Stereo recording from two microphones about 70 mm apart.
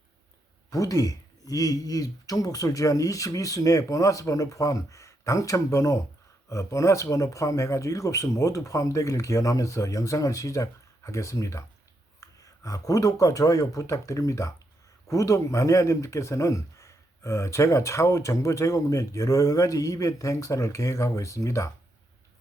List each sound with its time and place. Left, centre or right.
0.7 s speech: left